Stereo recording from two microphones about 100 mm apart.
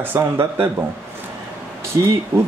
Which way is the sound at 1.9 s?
30° right (ahead or behind).